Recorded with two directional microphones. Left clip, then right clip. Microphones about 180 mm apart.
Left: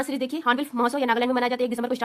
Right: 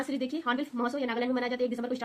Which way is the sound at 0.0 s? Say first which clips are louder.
Left 7 dB; 45° left (ahead or behind).